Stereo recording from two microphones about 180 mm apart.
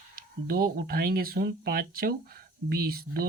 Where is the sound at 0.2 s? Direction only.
55° right (ahead or behind).